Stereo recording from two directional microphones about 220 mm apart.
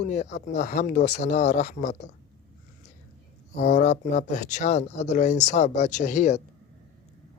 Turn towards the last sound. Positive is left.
turn(degrees=35)  # may be behind; listen again after turning